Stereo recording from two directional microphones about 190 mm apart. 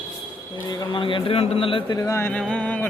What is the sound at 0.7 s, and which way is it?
A man's voice, 25° left (ahead or behind).